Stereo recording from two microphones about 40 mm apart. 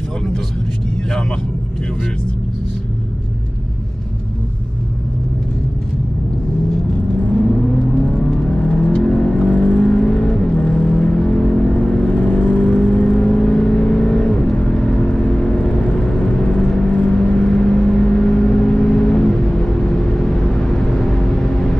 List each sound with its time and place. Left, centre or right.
7.2 s vehicle: centre